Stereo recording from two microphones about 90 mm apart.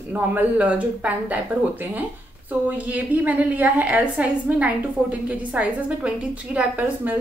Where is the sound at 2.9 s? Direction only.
15° right (ahead or behind).